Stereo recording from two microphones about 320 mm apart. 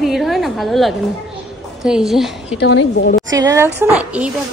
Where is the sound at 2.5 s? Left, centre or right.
Left.